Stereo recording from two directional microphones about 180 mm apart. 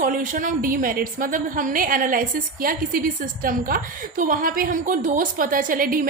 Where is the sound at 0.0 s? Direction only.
50° right (ahead or behind).